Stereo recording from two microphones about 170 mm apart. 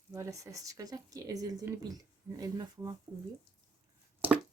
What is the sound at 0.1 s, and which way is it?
Speech, 20° right (ahead or behind).